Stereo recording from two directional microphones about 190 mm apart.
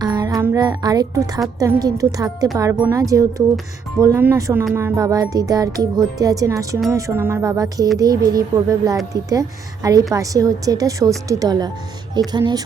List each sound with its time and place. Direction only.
0.0 s music: 20° right (ahead or behind)
1.5 s a woman's voice: 15° right (ahead or behind)